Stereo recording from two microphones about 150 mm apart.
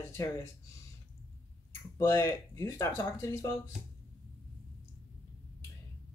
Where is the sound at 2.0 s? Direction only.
15° left (ahead or behind).